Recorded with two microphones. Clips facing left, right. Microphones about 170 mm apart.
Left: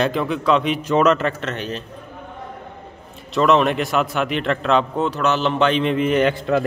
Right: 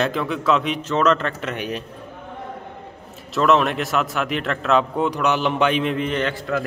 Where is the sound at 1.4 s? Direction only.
10° right (ahead or behind).